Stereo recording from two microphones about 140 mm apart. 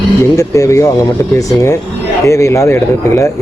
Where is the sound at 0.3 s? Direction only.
25° left (ahead or behind).